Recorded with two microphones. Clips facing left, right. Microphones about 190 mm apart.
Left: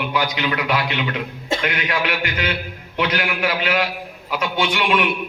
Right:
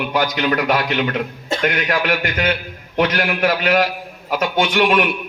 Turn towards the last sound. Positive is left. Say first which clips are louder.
# right 4 dB
turn(degrees=-45)  # may be behind; listen again after turning